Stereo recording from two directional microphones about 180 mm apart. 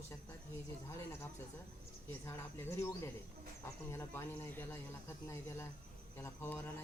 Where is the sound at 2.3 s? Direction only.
15° left (ahead or behind).